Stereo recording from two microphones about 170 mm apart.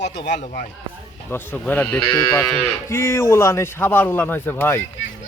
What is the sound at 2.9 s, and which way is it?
A man's voice, 15° left (ahead or behind).